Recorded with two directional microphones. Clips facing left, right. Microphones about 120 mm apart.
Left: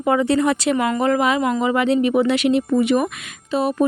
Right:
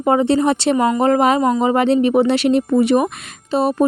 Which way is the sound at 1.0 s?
35° right (ahead or behind).